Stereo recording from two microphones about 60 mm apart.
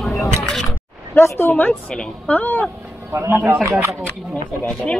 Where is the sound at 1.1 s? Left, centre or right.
Left.